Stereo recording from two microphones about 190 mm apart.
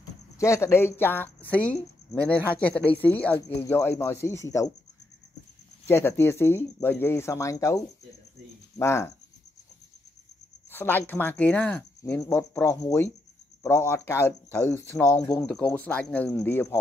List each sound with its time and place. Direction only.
0.4 s speech: 15° left (ahead or behind)
5.9 s speech: 10° left (ahead or behind)
10.7 s speech: 10° left (ahead or behind)